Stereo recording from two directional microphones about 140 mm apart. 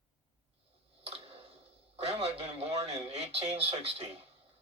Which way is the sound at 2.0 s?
45° right (ahead or behind).